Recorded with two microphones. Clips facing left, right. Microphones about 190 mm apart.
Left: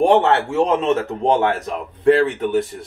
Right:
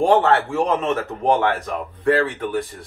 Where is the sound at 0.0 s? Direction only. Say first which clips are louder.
Left 1 dB; 20° left (ahead or behind).